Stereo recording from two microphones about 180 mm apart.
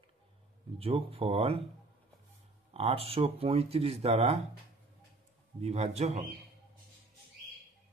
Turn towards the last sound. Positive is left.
turn(degrees=-35)  # may be behind; listen again after turning